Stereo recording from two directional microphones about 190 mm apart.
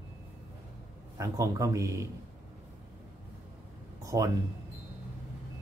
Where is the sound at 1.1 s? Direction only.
15° right (ahead or behind).